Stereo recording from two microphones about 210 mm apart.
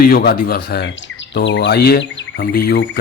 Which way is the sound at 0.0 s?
45° left (ahead or behind).